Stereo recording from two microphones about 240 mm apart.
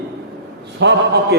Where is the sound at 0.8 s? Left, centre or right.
Right.